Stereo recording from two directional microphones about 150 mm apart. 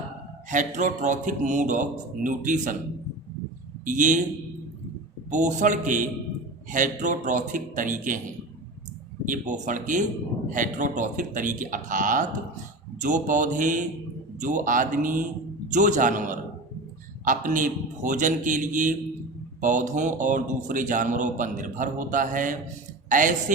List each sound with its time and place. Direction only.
0.5 s a man's voice: 55° right (ahead or behind)
3.8 s a man's voice: 60° right (ahead or behind)
5.3 s a man's voice: 55° right (ahead or behind)
9.2 s a man's voice: 60° right (ahead or behind)